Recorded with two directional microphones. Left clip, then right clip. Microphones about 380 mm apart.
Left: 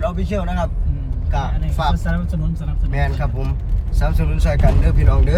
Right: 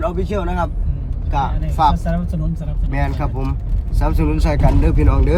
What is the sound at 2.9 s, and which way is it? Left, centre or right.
Speech, centre.